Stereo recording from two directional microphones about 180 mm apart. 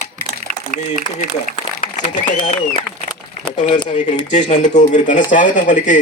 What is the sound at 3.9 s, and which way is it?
Speech, 40° left (ahead or behind).